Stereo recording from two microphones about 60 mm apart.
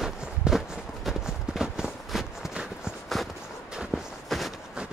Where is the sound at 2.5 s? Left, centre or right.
Centre.